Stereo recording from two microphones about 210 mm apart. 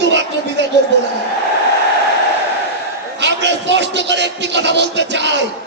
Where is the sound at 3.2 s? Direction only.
55° right (ahead or behind).